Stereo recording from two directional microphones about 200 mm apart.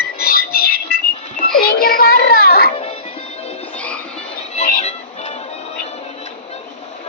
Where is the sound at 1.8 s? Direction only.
50° left (ahead or behind).